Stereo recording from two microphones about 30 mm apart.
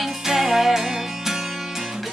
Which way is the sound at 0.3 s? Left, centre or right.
Centre.